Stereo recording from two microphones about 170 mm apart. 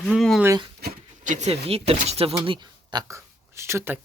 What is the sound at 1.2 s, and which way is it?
Speech, 45° right (ahead or behind).